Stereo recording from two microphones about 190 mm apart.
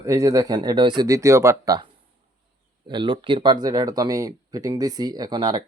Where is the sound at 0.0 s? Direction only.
15° right (ahead or behind).